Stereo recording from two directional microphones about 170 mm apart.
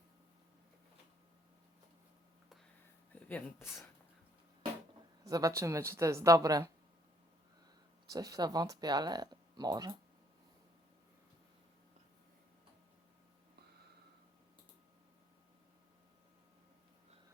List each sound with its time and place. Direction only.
3.1 s speech: 10° left (ahead or behind)
5.2 s speech: 20° right (ahead or behind)
8.1 s speech: 20° right (ahead or behind)